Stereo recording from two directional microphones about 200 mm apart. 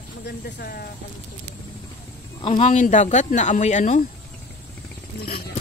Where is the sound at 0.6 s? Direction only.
50° left (ahead or behind).